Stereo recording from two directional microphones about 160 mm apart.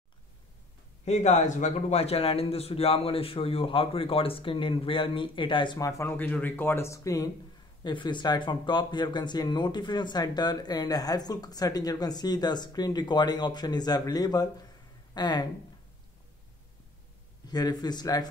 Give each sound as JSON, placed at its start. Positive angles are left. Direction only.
{"t": 1.0, "sound": "a man's voice", "side_deg": 45}
{"t": 17.5, "sound": "speech", "side_deg": 25}